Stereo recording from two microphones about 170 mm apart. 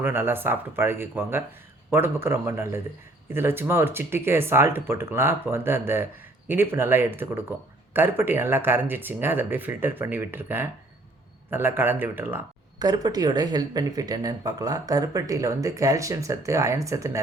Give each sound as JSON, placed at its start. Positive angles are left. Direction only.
{"t": 0.0, "sound": "speech", "side_deg": -10}
{"t": 12.8, "sound": "speech", "side_deg": -25}